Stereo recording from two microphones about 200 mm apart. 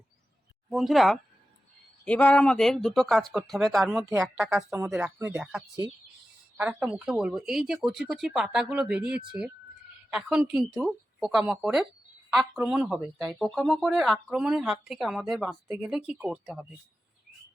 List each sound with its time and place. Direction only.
0.7 s speech: centre (ahead or behind)